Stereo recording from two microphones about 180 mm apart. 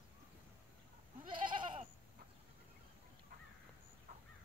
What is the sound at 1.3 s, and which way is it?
Goat, 25° right (ahead or behind).